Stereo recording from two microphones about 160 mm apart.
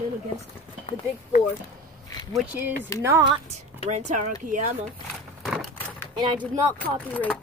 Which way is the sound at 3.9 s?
45° right (ahead or behind).